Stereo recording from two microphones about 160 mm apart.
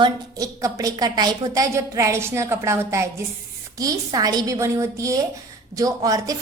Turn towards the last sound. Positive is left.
turn(degrees=-20)  # may be behind; listen again after turning